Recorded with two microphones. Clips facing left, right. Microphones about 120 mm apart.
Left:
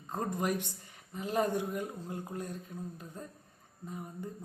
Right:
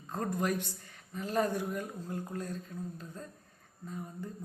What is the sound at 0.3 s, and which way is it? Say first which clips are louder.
Speech: right 1 dB; 15° left (ahead or behind).